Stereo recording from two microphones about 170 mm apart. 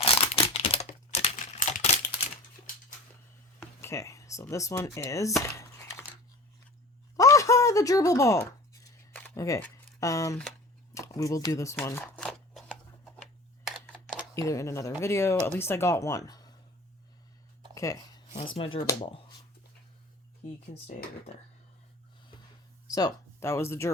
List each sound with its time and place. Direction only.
0.0 s crumpling: 35° left (ahead or behind)
3.8 s speech: 15° left (ahead or behind)
5.4 s typing: 15° left (ahead or behind)
7.2 s a sound: 20° left (ahead or behind)
9.3 s speech: 20° left (ahead or behind)
10.9 s a sound: 20° left (ahead or behind)
13.7 s camera: 5° left (ahead or behind)
14.3 s speech: 20° left (ahead or behind)
17.7 s speech: 20° left (ahead or behind)
20.8 s speech: 40° left (ahead or behind)
22.9 s speech: 20° left (ahead or behind)